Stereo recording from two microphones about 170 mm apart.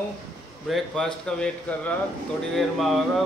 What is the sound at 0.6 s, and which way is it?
A man's voice, centre (ahead or behind).